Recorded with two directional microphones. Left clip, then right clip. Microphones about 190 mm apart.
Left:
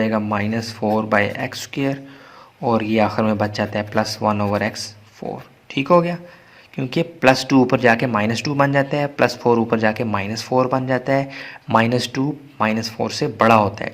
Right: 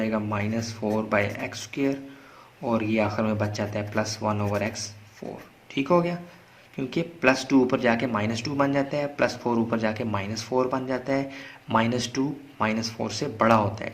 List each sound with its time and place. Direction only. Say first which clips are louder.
0.0 s speech: left 7 dB; 40° left (ahead or behind)